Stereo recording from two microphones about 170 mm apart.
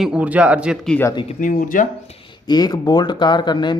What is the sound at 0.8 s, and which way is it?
Speech, 10° left (ahead or behind).